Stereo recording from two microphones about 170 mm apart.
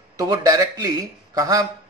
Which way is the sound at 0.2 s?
20° right (ahead or behind).